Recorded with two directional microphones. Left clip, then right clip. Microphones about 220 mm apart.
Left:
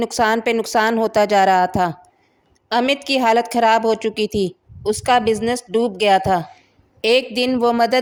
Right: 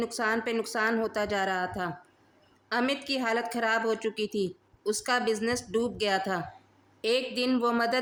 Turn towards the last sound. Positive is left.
turn(degrees=30)  # may be behind; listen again after turning